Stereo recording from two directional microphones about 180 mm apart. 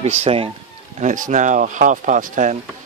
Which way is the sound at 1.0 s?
45° right (ahead or behind).